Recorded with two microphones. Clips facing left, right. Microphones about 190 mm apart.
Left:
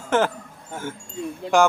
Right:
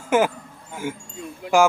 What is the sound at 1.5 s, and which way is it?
Speech, 25° left (ahead or behind).